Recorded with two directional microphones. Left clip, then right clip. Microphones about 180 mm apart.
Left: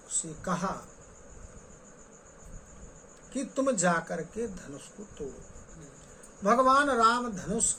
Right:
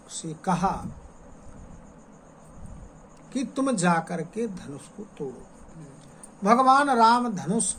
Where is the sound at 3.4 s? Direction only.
30° right (ahead or behind).